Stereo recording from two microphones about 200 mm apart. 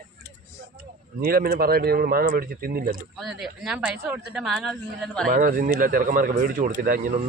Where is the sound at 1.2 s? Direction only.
50° right (ahead or behind).